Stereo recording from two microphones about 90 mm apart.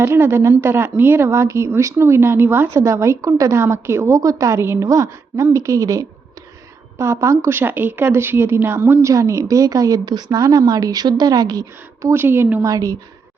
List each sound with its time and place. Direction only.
0.0 s a woman's voice: 30° right (ahead or behind)
12.1 s a woman's voice: 25° right (ahead or behind)
12.6 s speech: 40° right (ahead or behind)